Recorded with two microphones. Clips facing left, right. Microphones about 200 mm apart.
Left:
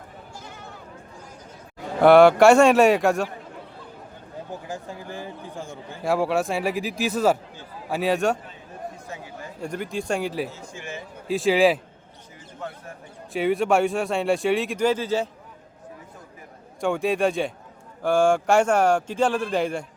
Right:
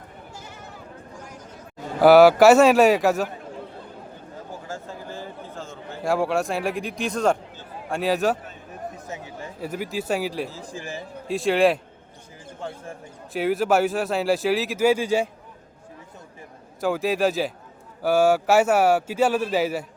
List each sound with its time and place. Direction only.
2.0 s a man's voice: 5° right (ahead or behind)
4.7 s a man's voice: 15° left (ahead or behind)
6.0 s a man's voice: centre (ahead or behind)
9.0 s chatter: 20° right (ahead or behind)
9.6 s a man's voice: 5° right (ahead or behind)
10.5 s speech: 35° right (ahead or behind)
11.3 s a man's voice: centre (ahead or behind)
12.6 s bird: 30° right (ahead or behind)
13.3 s a man's voice: centre (ahead or behind)
16.8 s a man's voice: centre (ahead or behind)